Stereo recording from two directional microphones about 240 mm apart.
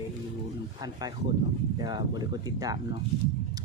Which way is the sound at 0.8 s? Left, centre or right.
Centre.